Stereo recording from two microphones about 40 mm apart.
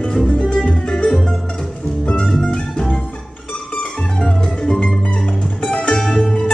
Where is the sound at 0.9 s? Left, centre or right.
Centre.